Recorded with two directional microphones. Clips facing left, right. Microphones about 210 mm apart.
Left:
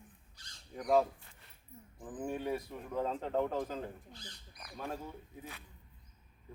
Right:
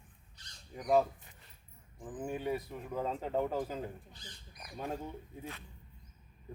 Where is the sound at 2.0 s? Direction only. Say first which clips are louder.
Right 1 dB; centre (ahead or behind); by 5.1 s 15° right (ahead or behind).